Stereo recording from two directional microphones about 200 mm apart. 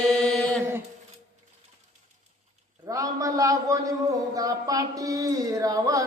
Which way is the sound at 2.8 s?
15° right (ahead or behind).